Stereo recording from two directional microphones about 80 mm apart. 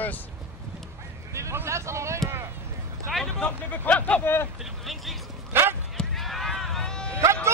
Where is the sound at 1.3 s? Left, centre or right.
Right.